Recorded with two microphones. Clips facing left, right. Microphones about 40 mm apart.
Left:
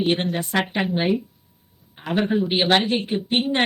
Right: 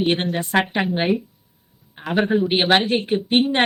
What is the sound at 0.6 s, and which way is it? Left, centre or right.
Speech, centre.